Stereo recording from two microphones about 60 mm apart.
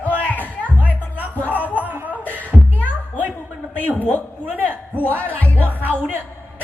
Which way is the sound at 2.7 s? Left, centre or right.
Left.